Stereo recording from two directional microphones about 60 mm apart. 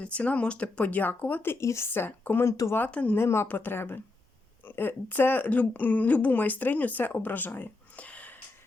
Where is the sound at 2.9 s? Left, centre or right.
Left.